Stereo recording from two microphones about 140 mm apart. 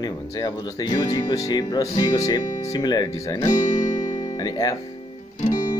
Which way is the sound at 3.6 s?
55° left (ahead or behind).